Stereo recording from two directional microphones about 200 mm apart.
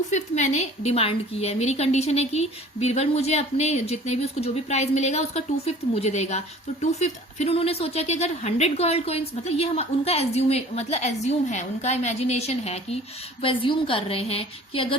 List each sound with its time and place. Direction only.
0.1 s a woman's voice: 35° left (ahead or behind)